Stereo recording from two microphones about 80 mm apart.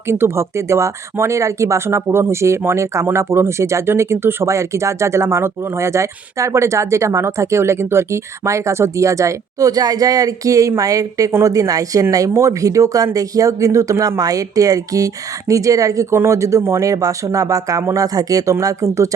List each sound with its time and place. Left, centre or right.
0.1 s speech: right